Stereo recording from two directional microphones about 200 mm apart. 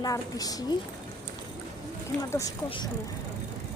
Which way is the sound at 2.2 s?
15° left (ahead or behind).